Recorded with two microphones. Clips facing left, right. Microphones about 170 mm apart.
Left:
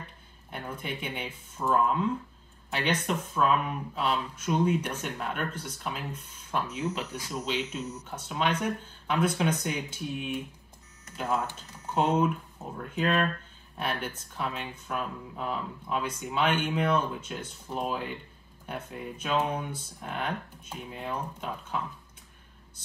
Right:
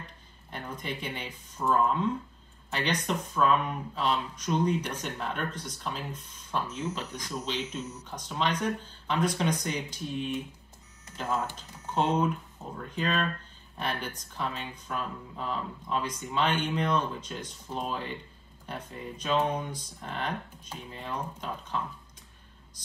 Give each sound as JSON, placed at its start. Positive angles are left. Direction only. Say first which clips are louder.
{"t": 0.5, "sound": "speech", "louder": "left 1 dB", "side_deg": 5}
{"t": 11.9, "sound": "speech", "louder": "left 1 dB", "side_deg": 10}